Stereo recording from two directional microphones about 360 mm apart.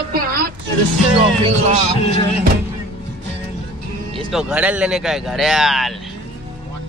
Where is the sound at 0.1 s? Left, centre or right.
Right.